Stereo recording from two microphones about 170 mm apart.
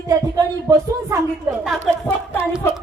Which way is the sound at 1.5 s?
5° right (ahead or behind).